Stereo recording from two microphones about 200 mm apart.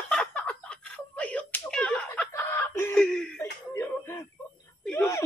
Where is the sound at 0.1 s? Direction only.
5° left (ahead or behind).